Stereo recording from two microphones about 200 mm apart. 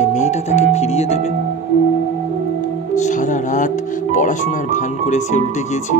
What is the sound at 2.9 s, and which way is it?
Speech, 40° left (ahead or behind).